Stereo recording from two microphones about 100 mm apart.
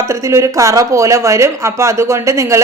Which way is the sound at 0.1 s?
30° right (ahead or behind).